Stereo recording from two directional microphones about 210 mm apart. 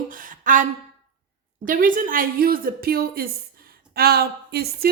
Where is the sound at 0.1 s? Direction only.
40° right (ahead or behind).